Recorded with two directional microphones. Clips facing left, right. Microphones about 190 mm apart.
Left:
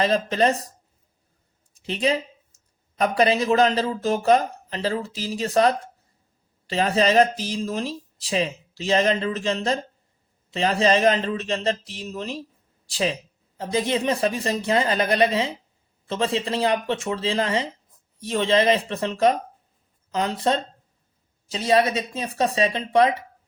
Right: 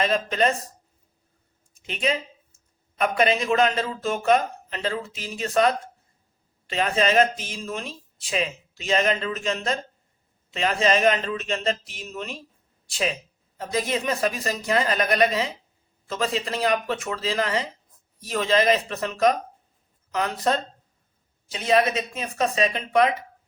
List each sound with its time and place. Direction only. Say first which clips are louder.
0.0 s speech: left 2 dB; 30° left (ahead or behind)
1.7 s a sound: left 3 dB; 35° left (ahead or behind)
3.0 s speech: left 2 dB; 35° left (ahead or behind)